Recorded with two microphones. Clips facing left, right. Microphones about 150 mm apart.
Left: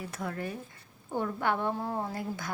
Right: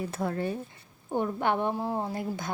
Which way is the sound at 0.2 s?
30° right (ahead or behind).